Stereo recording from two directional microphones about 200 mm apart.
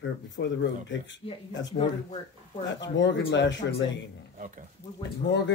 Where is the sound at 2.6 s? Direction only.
65° left (ahead or behind).